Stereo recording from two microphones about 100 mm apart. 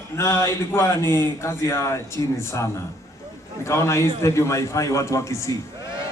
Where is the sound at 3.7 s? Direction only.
30° left (ahead or behind).